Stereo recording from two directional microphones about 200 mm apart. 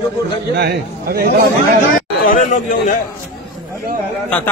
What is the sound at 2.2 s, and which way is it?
Speech, 40° left (ahead or behind).